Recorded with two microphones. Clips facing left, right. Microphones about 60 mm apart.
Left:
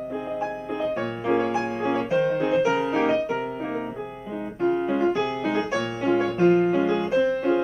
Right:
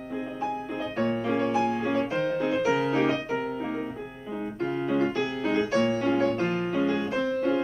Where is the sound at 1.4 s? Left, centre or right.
Left.